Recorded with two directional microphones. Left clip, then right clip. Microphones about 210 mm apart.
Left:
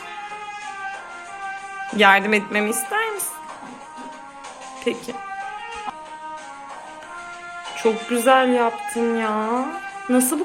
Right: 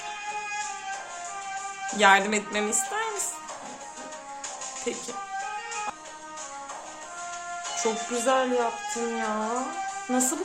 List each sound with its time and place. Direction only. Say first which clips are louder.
2.0 s music: left 5 dB; 15° left (ahead or behind)
4.9 s music: left 8 dB; 15° left (ahead or behind)
7.8 s music: left 8 dB; 15° left (ahead or behind)